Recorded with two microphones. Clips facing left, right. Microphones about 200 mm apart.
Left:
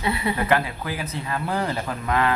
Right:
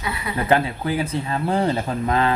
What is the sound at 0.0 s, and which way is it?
Speech, 30° left (ahead or behind).